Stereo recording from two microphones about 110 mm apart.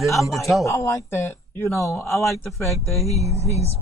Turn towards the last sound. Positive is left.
turn(degrees=-30)  # may be behind; listen again after turning